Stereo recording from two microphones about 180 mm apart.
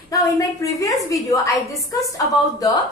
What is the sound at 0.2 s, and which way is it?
A woman's voice, 20° left (ahead or behind).